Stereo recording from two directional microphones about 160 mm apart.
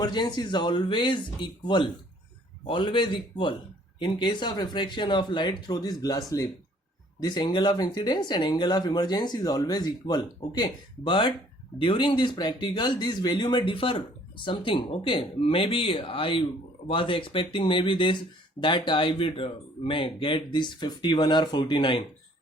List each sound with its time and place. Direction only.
0.0 s speech: 25° left (ahead or behind)